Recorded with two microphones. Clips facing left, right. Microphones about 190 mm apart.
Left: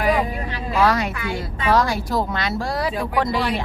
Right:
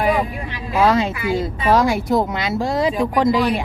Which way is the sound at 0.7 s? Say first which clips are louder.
Right 3 dB; 20° right (ahead or behind).